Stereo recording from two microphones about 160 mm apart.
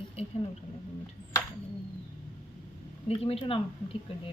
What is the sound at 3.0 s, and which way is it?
Speech, 35° left (ahead or behind).